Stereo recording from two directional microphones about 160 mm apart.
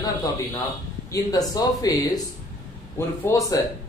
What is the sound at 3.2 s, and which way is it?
Speech, 20° left (ahead or behind).